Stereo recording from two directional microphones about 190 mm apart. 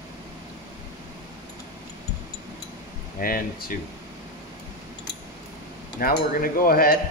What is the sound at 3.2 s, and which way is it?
Speech, 50° left (ahead or behind).